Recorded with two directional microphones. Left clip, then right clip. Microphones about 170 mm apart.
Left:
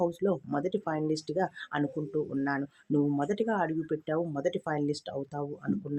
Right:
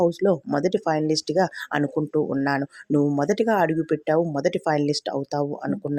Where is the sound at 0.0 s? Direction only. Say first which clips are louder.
Right 9 dB; 30° right (ahead or behind).